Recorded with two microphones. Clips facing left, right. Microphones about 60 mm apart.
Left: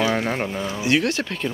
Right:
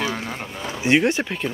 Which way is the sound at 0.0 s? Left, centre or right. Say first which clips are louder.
Left 5 dB; left.